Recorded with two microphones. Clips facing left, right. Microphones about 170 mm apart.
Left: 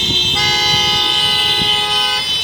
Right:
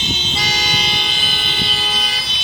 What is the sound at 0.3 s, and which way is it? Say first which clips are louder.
Vehicle: left 4 dB; 65° left (ahead or behind).